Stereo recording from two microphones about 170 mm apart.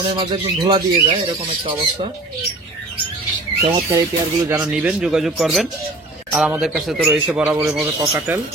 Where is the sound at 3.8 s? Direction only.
20° right (ahead or behind).